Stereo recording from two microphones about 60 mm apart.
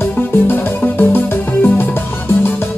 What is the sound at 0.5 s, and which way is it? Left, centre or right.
Music, left.